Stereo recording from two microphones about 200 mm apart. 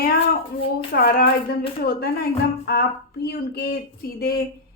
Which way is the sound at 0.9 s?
50° left (ahead or behind).